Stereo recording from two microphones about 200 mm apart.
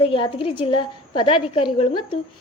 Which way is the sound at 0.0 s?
25° left (ahead or behind).